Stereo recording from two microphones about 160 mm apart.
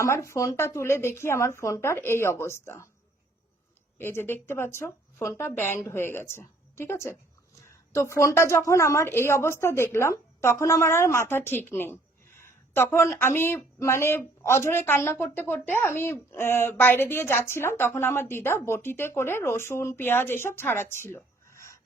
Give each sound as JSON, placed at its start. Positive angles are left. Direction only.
{"t": 0.0, "sound": "speech", "side_deg": 20}
{"t": 3.9, "sound": "speech", "side_deg": 15}